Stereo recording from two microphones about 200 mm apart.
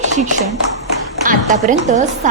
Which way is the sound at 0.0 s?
35° right (ahead or behind).